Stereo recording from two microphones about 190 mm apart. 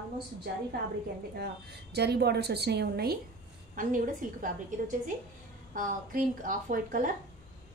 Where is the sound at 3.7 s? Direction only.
45° right (ahead or behind).